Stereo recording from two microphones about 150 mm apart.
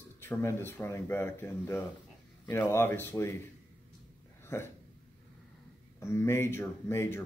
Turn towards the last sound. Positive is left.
turn(degrees=15)  # may be behind; listen again after turning